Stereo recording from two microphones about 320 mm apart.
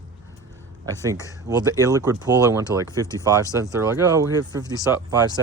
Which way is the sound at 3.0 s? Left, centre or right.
Centre.